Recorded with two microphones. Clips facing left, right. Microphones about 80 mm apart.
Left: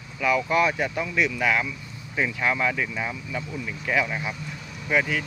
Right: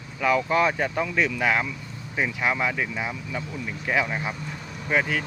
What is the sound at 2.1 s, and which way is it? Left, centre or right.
Speech, centre.